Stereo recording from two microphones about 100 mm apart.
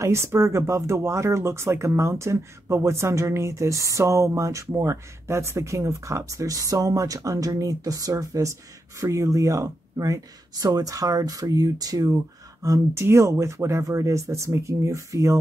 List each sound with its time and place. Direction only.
0.0 s speech: 25° right (ahead or behind)